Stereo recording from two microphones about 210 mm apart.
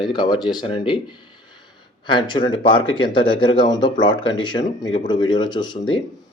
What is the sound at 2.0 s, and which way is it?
Speech, 20° left (ahead or behind).